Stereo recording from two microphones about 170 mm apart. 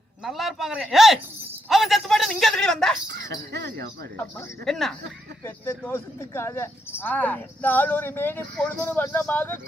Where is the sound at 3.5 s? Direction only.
80° right.